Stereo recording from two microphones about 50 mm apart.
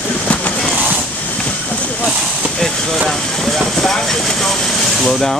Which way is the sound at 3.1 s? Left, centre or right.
Centre.